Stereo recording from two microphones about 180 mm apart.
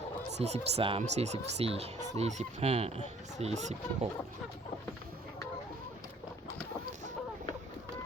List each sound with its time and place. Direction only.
0.3 s speech: 35° right (ahead or behind)